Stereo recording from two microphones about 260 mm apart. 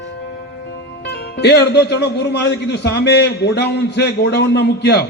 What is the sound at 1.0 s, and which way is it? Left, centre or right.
A man's voice, left.